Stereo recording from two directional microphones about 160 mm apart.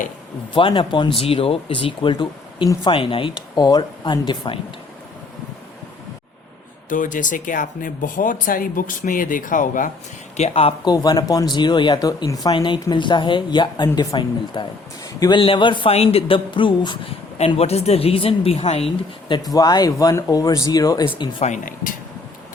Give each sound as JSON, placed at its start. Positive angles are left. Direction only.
{"t": 0.5, "sound": "a man's voice", "side_deg": 30}
{"t": 6.9, "sound": "speech", "side_deg": 55}
{"t": 10.3, "sound": "a man's voice", "side_deg": 40}
{"t": 10.9, "sound": "a man's voice", "side_deg": 25}
{"t": 19.5, "sound": "speech", "side_deg": 25}
{"t": 21.4, "sound": "speech", "side_deg": 55}